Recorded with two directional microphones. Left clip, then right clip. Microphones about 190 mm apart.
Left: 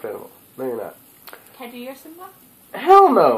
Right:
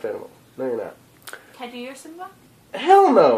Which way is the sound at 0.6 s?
10° right (ahead or behind).